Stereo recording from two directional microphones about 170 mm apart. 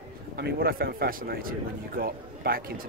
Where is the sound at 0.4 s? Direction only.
65° right (ahead or behind).